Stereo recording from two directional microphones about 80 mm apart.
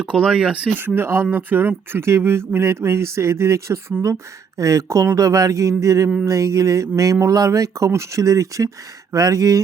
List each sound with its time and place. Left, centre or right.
0.0 s speech: centre
0.8 s a sound: right
2.5 s speech: right